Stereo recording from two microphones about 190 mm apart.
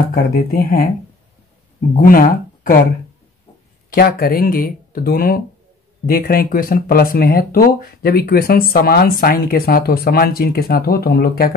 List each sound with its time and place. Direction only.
0.1 s speech: 50° left (ahead or behind)
2.0 s speech: 50° left (ahead or behind)
3.9 s speech: 50° left (ahead or behind)